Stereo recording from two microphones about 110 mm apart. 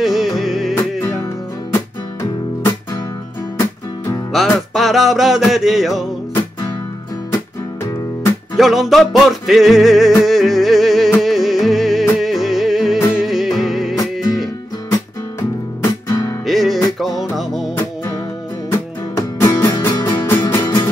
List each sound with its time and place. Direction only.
0.0 s music: centre (ahead or behind)
0.7 s music: 25° left (ahead or behind)
4.3 s music: centre (ahead or behind)
8.5 s music: centre (ahead or behind)
15.8 s guitar: 30° left (ahead or behind)
16.4 s music: centre (ahead or behind)
19.5 s music: 25° left (ahead or behind)